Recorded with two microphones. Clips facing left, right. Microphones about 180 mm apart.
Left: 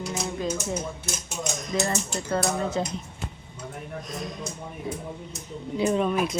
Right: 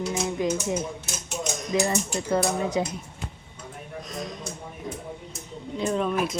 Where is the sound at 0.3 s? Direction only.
15° right (ahead or behind).